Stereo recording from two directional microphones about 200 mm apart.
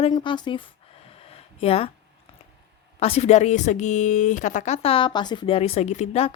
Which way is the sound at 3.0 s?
30° left (ahead or behind).